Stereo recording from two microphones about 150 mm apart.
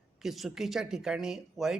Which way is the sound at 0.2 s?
Centre (ahead or behind).